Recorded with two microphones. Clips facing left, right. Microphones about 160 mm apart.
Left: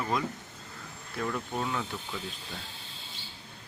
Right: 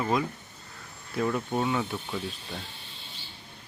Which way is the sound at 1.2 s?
20° right (ahead or behind).